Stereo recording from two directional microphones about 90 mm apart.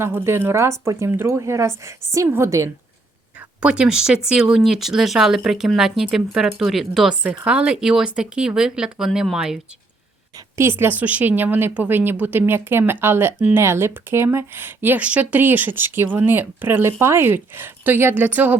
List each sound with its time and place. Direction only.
0.0 s speech: 25° right (ahead or behind)
3.6 s speech: 10° right (ahead or behind)
10.6 s speech: 25° right (ahead or behind)